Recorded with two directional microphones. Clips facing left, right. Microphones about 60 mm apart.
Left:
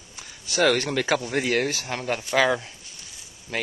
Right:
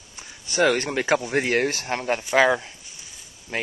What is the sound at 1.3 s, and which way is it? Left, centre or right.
Speech, right.